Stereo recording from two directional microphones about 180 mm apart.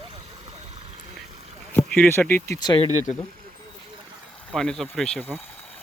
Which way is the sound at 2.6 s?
25° left (ahead or behind).